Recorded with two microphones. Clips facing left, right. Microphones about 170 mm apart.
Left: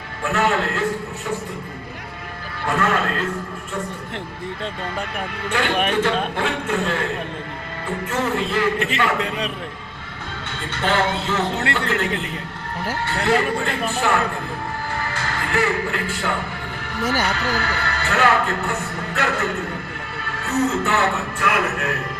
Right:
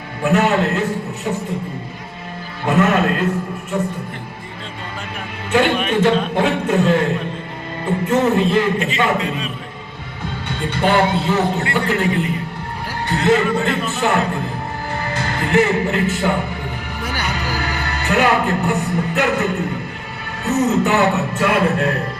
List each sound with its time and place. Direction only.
0.2 s speech: 20° right (ahead or behind)
2.6 s speech: 20° right (ahead or behind)
5.5 s speech: 20° right (ahead or behind)
8.0 s speech: 20° right (ahead or behind)
9.1 s a man's voice: 65° left (ahead or behind)
10.5 s speech: 15° right (ahead or behind)
13.1 s speech: 20° right (ahead or behind)